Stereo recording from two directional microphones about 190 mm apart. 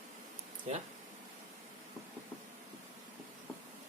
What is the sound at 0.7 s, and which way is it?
Speech, 35° right (ahead or behind).